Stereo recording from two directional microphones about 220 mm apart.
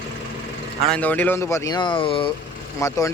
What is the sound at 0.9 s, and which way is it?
Speech, 5° left (ahead or behind).